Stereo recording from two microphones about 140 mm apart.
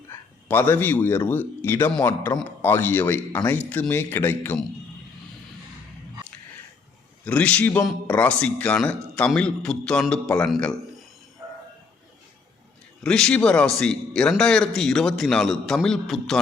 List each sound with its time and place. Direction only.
0.1 s a man's voice: 15° left (ahead or behind)
7.3 s a man's voice: 10° left (ahead or behind)
13.0 s a man's voice: 5° left (ahead or behind)